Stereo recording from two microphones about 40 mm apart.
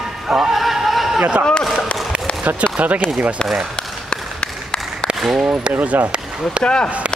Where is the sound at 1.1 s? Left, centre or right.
Right.